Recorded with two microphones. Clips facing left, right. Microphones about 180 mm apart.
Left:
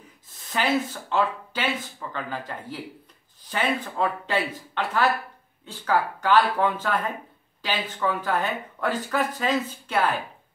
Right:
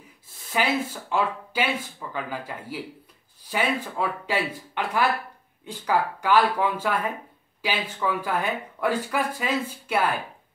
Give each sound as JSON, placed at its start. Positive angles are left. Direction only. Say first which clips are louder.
{"t": 0.5, "sound": "speech", "louder": "left 1 dB", "side_deg": -10}